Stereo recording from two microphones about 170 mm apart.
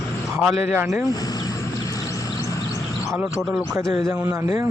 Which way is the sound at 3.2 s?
Centre (ahead or behind).